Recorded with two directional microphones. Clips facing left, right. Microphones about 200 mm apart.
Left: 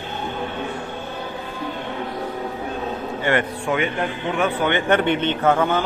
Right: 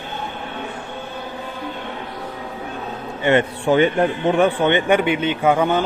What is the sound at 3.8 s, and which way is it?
Speech, 35° right (ahead or behind).